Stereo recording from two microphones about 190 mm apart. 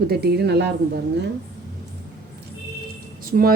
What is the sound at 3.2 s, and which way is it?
Music, 50° right (ahead or behind).